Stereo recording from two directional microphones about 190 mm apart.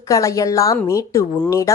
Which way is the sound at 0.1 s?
15° left (ahead or behind).